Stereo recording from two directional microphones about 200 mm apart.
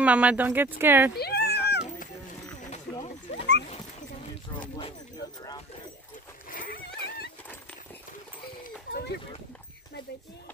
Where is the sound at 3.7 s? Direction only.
35° left (ahead or behind).